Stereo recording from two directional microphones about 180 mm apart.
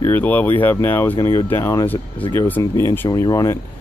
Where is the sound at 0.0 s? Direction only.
10° left (ahead or behind).